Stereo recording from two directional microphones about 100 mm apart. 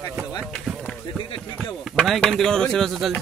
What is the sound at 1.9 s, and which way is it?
Speech, 10° left (ahead or behind).